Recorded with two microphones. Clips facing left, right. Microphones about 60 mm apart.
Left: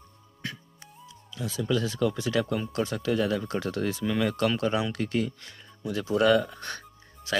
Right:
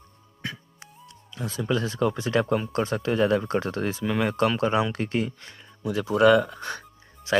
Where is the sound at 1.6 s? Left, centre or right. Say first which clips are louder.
Right 1 dB; right.